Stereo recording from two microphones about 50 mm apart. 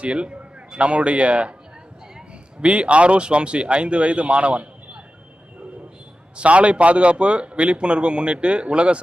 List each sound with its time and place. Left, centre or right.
0.0 s a man's voice: right
2.6 s a man's voice: right
6.3 s a man's voice: right